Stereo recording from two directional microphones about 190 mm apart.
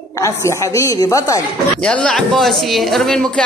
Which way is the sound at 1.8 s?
5° left (ahead or behind).